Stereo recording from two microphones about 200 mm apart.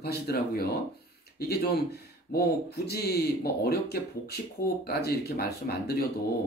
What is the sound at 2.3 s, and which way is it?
Speech, 50° left (ahead or behind).